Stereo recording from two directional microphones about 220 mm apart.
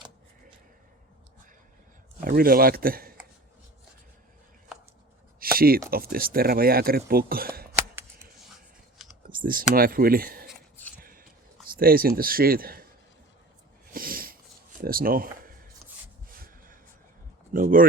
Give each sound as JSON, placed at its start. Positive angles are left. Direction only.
{"t": 2.2, "sound": "speech", "side_deg": -40}
{"t": 5.5, "sound": "speech", "side_deg": -40}
{"t": 9.3, "sound": "computer keyboard", "side_deg": -40}
{"t": 9.7, "sound": "speech", "side_deg": -40}
{"t": 11.0, "sound": "a sound", "side_deg": -40}
{"t": 11.7, "sound": "speech", "side_deg": -40}
{"t": 13.9, "sound": "a sound", "side_deg": -40}
{"t": 14.8, "sound": "speech", "side_deg": -40}
{"t": 17.5, "sound": "speech", "side_deg": -40}